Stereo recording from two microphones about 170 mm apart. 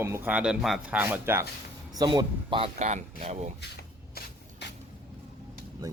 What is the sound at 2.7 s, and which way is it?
Speech, 45° right (ahead or behind).